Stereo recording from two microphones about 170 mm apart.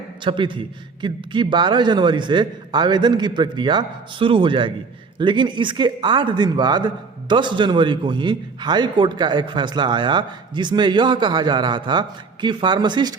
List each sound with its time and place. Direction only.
0.3 s speech: 30° right (ahead or behind)